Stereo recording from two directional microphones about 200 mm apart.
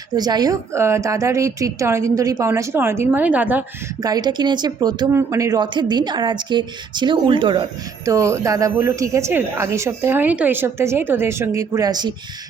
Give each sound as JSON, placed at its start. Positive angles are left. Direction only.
{"t": 0.1, "sound": "speech", "side_deg": -20}
{"t": 4.0, "sound": "speech", "side_deg": -20}